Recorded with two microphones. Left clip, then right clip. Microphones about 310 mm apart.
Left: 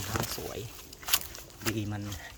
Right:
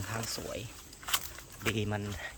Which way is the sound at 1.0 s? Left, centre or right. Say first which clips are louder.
Left 3 dB; left.